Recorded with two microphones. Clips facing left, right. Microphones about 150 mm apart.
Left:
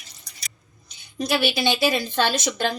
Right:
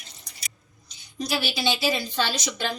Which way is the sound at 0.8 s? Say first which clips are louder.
Left 4 dB; 55° left (ahead or behind).